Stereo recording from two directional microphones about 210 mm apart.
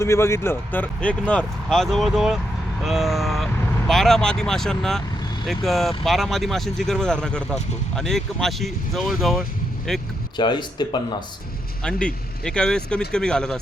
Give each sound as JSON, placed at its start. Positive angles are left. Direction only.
{"t": 0.0, "sound": "speech", "side_deg": 10}
{"t": 10.3, "sound": "speech", "side_deg": 20}
{"t": 11.8, "sound": "speech", "side_deg": 5}